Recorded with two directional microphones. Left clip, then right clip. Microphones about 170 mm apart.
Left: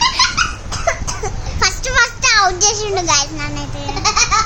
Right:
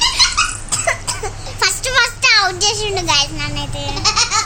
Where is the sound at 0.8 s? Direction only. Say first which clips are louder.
Left 1 dB; 5° left (ahead or behind).